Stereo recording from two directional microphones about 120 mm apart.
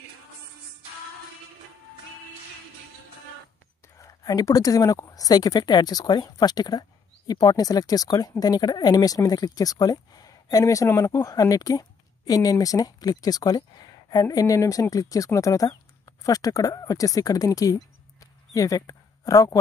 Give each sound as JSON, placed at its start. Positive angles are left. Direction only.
{"t": 4.0, "sound": "a woman's voice", "side_deg": 30}